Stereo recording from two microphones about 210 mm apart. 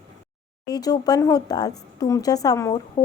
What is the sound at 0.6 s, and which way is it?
A woman's voice, 20° left (ahead or behind).